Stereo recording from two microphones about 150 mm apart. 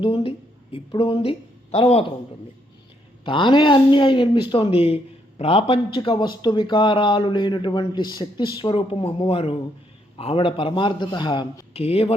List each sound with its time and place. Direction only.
0.0 s a woman's voice: 35° left (ahead or behind)
3.2 s speech: 35° left (ahead or behind)